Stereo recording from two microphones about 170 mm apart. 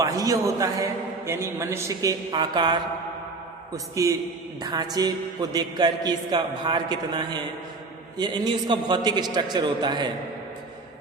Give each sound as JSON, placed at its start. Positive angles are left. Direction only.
{"t": 0.0, "sound": "a man's voice", "side_deg": -20}
{"t": 4.0, "sound": "a man's voice", "side_deg": -20}